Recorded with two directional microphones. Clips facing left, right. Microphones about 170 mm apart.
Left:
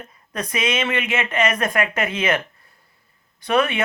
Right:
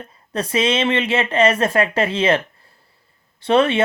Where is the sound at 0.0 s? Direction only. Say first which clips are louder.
Right 5 dB; 30° right (ahead or behind).